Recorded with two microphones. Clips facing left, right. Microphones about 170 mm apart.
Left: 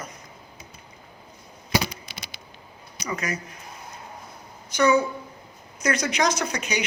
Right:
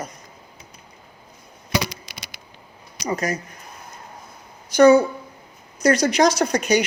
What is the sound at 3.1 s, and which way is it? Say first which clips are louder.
Speech: right 6 dB; 40° right (ahead or behind).